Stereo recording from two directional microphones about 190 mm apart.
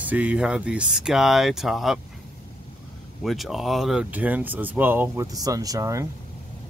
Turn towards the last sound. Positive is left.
turn(degrees=-15)  # may be behind; listen again after turning